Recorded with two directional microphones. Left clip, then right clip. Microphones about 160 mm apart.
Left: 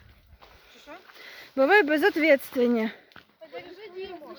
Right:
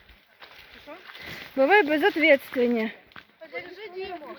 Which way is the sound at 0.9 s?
35° left (ahead or behind).